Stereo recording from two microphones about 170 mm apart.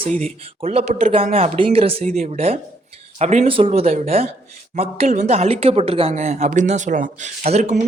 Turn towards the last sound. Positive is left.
turn(degrees=-40)  # may be behind; listen again after turning